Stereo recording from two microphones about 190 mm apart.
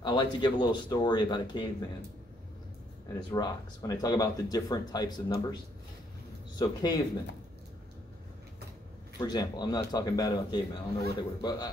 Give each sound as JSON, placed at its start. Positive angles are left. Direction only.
{"t": 0.0, "sound": "speech", "side_deg": 25}
{"t": 3.1, "sound": "speech", "side_deg": 20}
{"t": 6.6, "sound": "speech", "side_deg": 20}
{"t": 9.2, "sound": "speech", "side_deg": 20}